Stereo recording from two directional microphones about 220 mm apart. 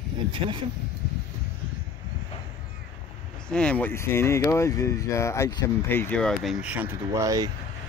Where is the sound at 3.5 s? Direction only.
5° left (ahead or behind); by 7.5 s 15° right (ahead or behind).